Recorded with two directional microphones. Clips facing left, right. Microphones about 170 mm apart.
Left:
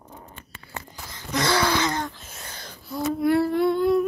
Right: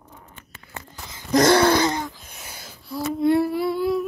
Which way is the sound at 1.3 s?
45° right (ahead or behind).